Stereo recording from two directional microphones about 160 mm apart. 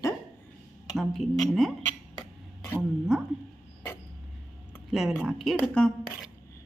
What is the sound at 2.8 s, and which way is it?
Speech, centre (ahead or behind).